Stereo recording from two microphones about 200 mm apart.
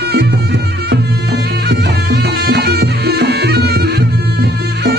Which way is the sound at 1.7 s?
55° right (ahead or behind).